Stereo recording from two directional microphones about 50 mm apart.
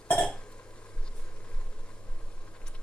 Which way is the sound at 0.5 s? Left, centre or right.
Left.